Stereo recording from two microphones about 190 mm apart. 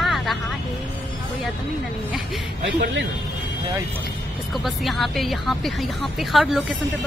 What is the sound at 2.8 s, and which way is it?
Speech, 70° right (ahead or behind).